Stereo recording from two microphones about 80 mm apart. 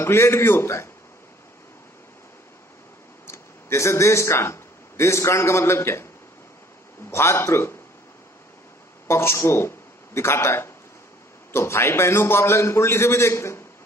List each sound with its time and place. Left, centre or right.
0.0 s a man's voice: left
3.2 s speech: left
7.1 s a man's voice: left
9.0 s a man's voice: left